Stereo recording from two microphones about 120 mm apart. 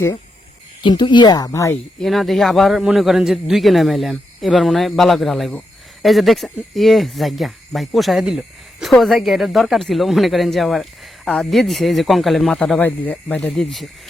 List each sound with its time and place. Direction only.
0.8 s speech: 40° left (ahead or behind)
2.0 s a man's voice: centre (ahead or behind)